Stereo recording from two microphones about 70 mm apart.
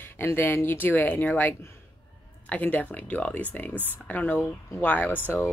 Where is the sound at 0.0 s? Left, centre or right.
Left.